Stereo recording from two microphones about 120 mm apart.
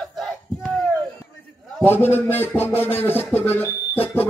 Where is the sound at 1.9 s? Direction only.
15° left (ahead or behind).